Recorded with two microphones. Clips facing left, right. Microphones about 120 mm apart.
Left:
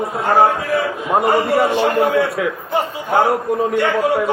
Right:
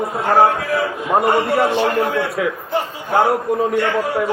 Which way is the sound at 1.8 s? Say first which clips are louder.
Left 2 dB; 55° left (ahead or behind).